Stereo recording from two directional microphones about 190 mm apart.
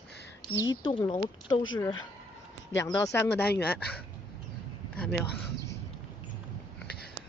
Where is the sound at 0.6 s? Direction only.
25° left (ahead or behind).